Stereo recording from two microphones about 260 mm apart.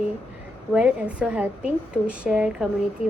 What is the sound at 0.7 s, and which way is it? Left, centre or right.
A woman's voice, centre.